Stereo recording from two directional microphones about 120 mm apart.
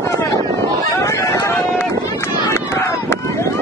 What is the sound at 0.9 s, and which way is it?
Run, 25° left (ahead or behind).